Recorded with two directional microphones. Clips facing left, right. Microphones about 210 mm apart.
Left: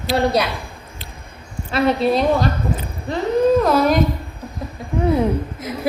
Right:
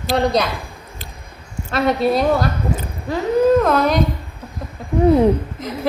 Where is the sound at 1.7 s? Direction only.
Centre (ahead or behind).